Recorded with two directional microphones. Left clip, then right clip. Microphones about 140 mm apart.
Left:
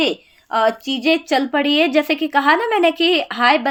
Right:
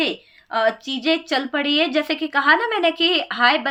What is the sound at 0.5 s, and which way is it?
Speech, 35° left (ahead or behind).